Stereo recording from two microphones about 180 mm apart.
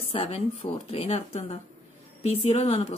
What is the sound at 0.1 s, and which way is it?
Speech, 35° left (ahead or behind).